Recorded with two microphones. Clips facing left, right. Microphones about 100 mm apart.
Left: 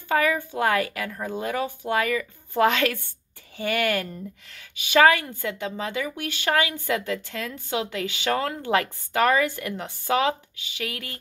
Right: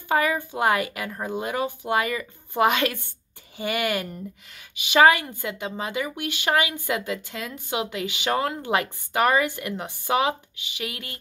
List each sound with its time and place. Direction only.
0.1 s a woman's voice: 20° right (ahead or behind)